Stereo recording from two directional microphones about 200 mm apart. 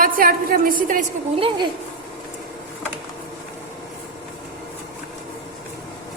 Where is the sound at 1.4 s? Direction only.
25° right (ahead or behind).